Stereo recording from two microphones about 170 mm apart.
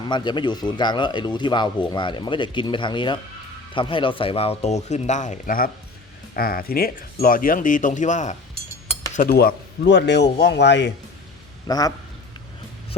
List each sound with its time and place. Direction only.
0.0 s speech: 25° left (ahead or behind); by 8.4 s 45° left (ahead or behind)
9.1 s speech: 60° left (ahead or behind); by 10.9 s 90° left
11.7 s speech: 20° left (ahead or behind)